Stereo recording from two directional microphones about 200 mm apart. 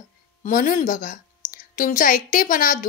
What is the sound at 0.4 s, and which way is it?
A woman's voice, 40° left (ahead or behind).